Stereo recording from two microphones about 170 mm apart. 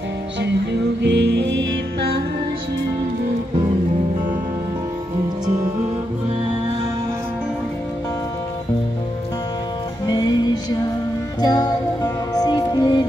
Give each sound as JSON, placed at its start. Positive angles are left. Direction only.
{"t": 1.0, "sound": "music", "side_deg": -85}
{"t": 10.0, "sound": "music", "side_deg": 25}
{"t": 11.4, "sound": "music", "side_deg": 25}